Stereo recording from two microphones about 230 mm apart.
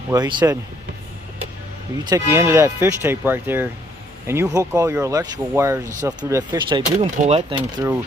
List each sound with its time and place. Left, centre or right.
0.1 s speech: centre
2.0 s speech: centre